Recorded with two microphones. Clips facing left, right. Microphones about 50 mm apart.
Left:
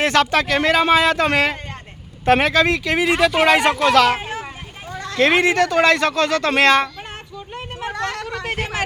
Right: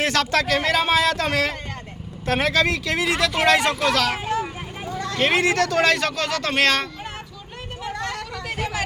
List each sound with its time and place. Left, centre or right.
0.0 s speech: left
2.2 s speech: left
2.5 s speech: left
3.8 s speech: left
4.2 s vehicle: left
5.3 s speech: left
7.9 s vehicle: left